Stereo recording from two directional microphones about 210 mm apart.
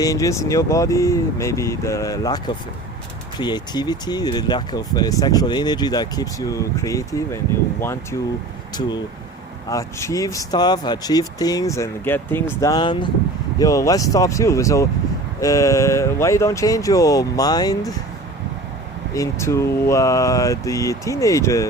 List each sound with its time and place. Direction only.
0.0 s speech: 15° left (ahead or behind)
9.6 s speech: 15° left (ahead or behind)
19.1 s speech: 15° left (ahead or behind)